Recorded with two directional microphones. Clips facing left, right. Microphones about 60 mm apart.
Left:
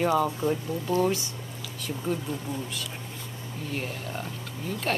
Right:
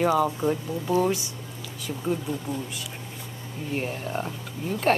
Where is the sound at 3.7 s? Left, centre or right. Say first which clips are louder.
Right 5 dB; right.